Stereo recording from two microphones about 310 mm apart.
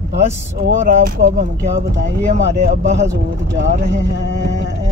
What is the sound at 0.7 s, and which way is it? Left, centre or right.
Speech, right.